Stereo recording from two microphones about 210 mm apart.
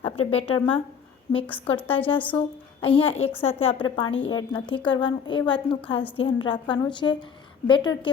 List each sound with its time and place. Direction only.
0.0 s a woman's voice: 30° left (ahead or behind)
4.0 s a woman's voice: 60° left (ahead or behind)
4.3 s a woman's voice: 20° left (ahead or behind)